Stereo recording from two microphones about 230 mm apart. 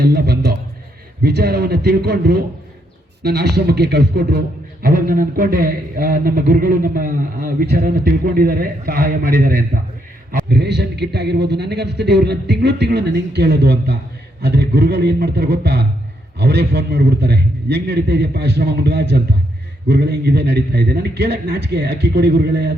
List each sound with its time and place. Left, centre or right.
0.0 s a man's voice: right